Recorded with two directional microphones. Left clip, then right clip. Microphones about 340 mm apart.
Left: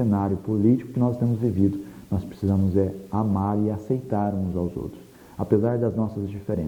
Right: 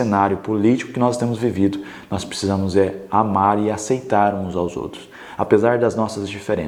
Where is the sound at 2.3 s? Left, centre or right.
Centre.